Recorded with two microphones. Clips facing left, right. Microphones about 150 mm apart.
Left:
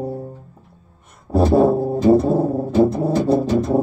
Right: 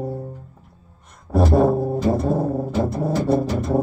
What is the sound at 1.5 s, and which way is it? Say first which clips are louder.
Music: left 3 dB; 30° left (ahead or behind).